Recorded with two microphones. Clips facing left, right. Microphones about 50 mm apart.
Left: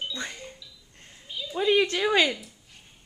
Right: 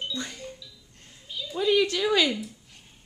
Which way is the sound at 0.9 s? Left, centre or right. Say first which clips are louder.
Even; centre.